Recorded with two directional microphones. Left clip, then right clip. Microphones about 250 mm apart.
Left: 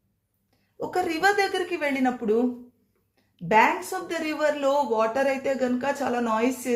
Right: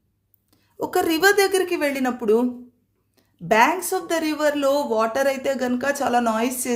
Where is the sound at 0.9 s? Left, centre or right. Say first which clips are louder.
Right 5 dB; right.